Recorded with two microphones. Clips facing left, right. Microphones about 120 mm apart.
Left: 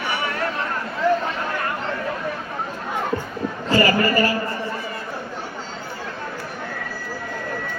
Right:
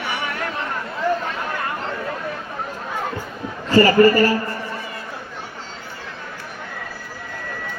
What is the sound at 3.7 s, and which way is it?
Speech, 40° right (ahead or behind).